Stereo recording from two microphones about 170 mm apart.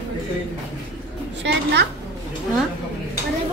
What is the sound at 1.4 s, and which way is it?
Speech, 90° right.